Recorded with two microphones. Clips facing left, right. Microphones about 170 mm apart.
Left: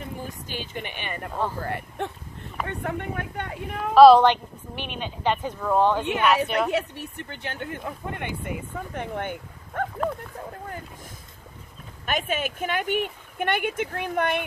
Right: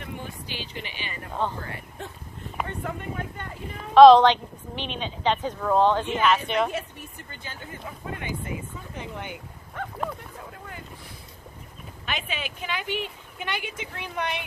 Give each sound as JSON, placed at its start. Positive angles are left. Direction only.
{"t": 0.5, "sound": "speech", "side_deg": 50}
{"t": 3.9, "sound": "a woman's voice", "side_deg": 5}
{"t": 6.7, "sound": "speech", "side_deg": 70}
{"t": 12.1, "sound": "speech", "side_deg": 50}